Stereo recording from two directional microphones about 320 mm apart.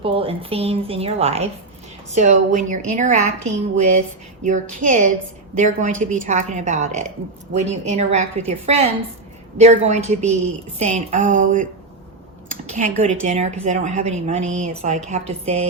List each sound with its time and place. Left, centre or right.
0.0 s a woman's voice: centre
4.9 s speech: right
12.5 s a sound: right
13.2 s speech: right